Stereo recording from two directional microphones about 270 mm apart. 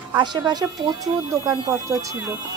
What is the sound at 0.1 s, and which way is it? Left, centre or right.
Speech, centre.